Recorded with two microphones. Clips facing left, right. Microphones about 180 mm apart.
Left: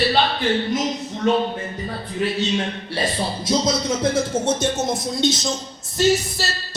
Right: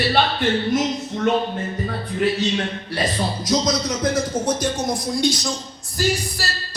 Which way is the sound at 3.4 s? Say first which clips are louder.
Left 1 dB; 25° left (ahead or behind).